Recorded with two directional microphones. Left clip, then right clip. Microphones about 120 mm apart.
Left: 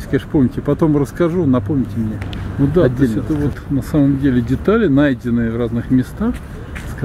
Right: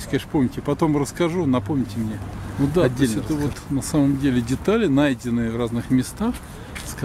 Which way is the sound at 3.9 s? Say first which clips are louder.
Left 5 dB; 40° right (ahead or behind).